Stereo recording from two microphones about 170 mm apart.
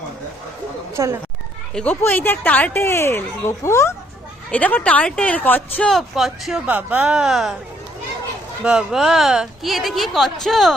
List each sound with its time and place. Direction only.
1.0 s speech: 20° right (ahead or behind)
1.7 s speech: 10° left (ahead or behind)
8.6 s speech: 5° right (ahead or behind)